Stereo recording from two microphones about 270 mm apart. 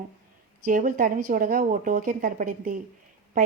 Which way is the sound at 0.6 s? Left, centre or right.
Right.